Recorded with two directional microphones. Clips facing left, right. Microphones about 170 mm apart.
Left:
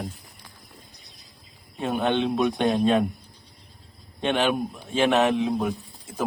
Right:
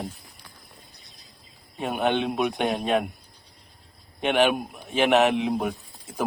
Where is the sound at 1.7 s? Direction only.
15° right (ahead or behind).